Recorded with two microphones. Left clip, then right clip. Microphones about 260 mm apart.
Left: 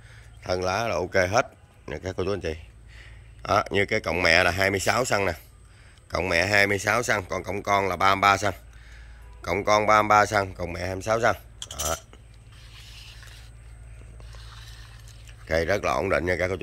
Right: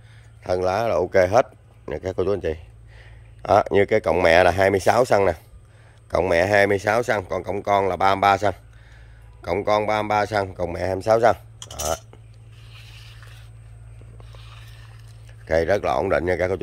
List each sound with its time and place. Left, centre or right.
0.1 s speech: centre
15.2 s speech: centre